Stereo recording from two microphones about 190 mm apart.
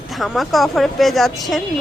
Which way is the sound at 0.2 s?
Centre (ahead or behind).